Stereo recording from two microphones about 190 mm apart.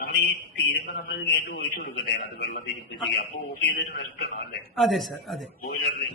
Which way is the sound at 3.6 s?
55° left (ahead or behind).